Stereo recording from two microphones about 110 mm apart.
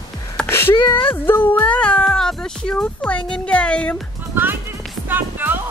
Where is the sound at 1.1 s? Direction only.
20° left (ahead or behind).